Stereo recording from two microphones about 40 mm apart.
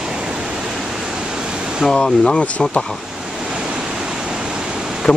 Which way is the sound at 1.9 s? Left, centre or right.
Centre.